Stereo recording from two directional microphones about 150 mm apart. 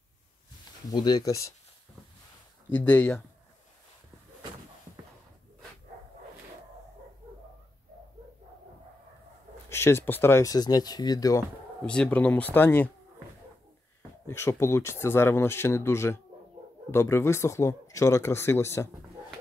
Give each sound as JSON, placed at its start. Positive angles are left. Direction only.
{"t": 0.8, "sound": "speech", "side_deg": 30}
{"t": 2.7, "sound": "speech", "side_deg": 10}
{"t": 9.7, "sound": "speech", "side_deg": 15}
{"t": 11.8, "sound": "speech", "side_deg": 5}
{"t": 14.2, "sound": "speech", "side_deg": 15}